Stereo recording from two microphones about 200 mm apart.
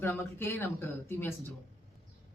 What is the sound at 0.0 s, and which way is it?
Speech, 10° left (ahead or behind).